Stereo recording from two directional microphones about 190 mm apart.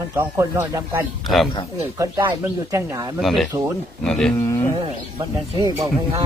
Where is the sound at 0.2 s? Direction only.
15° right (ahead or behind).